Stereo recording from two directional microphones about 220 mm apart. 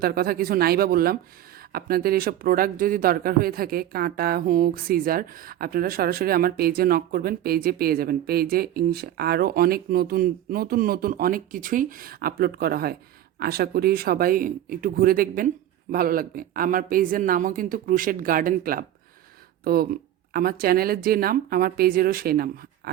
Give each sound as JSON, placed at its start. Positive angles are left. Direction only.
{"t": 0.0, "sound": "speech", "side_deg": -45}